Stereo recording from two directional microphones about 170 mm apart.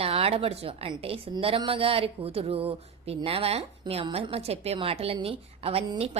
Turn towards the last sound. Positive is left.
turn(degrees=-35)  # may be behind; listen again after turning